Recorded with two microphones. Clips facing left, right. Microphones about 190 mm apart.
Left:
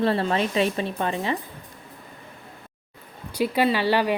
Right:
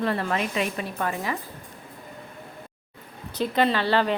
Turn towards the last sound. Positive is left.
turn(degrees=10)  # may be behind; listen again after turning